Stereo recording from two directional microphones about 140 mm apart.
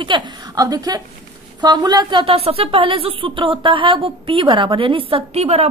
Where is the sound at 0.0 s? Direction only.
35° right (ahead or behind).